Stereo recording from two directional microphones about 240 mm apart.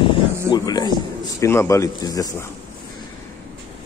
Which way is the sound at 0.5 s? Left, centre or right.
Centre.